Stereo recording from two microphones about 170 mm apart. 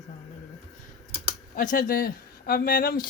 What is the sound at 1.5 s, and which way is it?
Speech, 55° left (ahead or behind).